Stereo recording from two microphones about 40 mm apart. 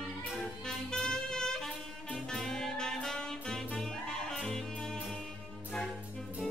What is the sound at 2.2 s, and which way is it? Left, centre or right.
Saxophone, centre.